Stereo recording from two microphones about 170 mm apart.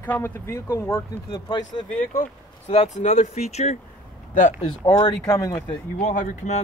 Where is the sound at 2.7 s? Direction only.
40° left (ahead or behind).